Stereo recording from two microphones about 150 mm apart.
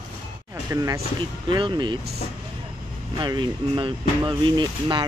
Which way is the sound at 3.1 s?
30° right (ahead or behind).